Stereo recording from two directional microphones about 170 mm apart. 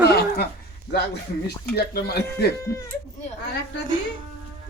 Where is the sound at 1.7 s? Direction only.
70° left (ahead or behind).